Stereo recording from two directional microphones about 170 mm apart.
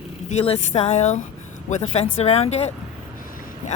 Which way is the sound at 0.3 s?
40° left (ahead or behind).